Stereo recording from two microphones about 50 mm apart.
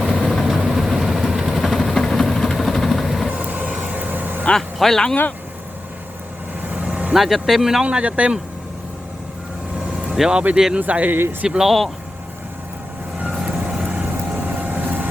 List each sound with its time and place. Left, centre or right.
0.0 s vehicle: centre
0.4 s vehicle: centre
3.2 s vehicle: right
4.5 s speech: centre
6.7 s vehicle: right
7.1 s speech: centre
7.9 s speech: right
10.1 s speech: centre
10.8 s speech: right
11.1 s speech: right
11.4 s speech: centre
13.4 s vehicle: centre
14.0 s vehicle: right